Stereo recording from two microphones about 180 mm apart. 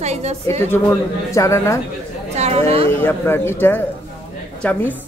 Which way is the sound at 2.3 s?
35° right (ahead or behind).